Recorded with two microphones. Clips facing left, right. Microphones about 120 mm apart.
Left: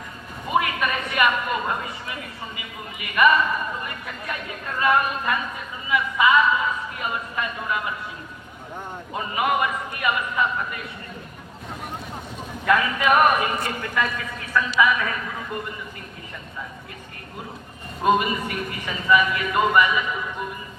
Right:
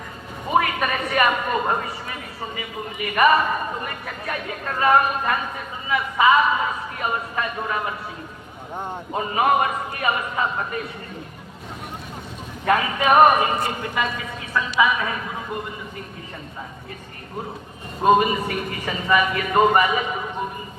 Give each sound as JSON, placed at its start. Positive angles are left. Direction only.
{"t": 0.5, "sound": "a sound", "side_deg": -40}
{"t": 2.6, "sound": "a man's voice", "side_deg": -35}
{"t": 9.1, "sound": "a man's voice", "side_deg": -35}
{"t": 12.6, "sound": "a man's voice", "side_deg": -30}
{"t": 18.0, "sound": "a man's voice", "side_deg": -30}